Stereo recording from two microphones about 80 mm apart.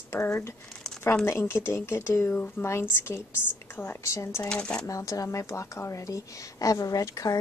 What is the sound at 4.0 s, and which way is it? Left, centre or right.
Speech, left.